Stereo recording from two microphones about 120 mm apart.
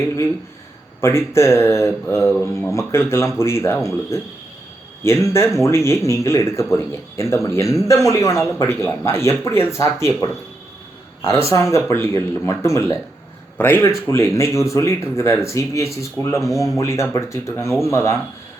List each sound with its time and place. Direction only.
1.0 s speech: 20° left (ahead or behind)
5.0 s speech: 20° left (ahead or behind)